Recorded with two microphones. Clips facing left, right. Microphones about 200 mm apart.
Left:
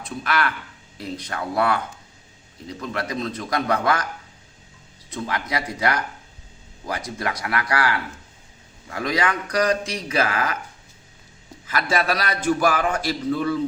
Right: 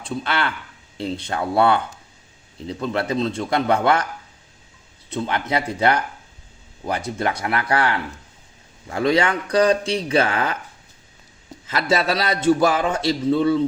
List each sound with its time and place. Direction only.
0.0 s a man's voice: 25° right (ahead or behind)
5.1 s a man's voice: 25° right (ahead or behind)
11.6 s a man's voice: 25° right (ahead or behind)